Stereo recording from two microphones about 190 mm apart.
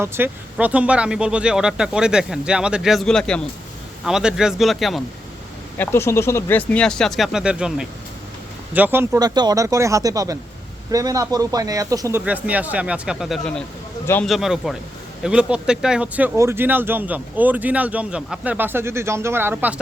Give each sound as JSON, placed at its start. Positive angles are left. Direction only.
{"t": 0.0, "sound": "speech", "side_deg": -15}
{"t": 5.7, "sound": "speech", "side_deg": 10}